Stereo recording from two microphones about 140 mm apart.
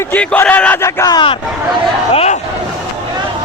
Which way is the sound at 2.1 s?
45° left (ahead or behind).